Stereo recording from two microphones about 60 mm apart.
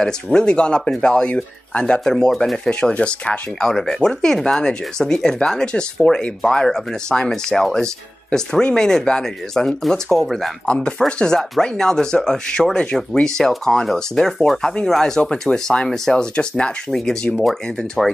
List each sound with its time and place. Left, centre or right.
0.0 s speech: centre
10.7 s speech: centre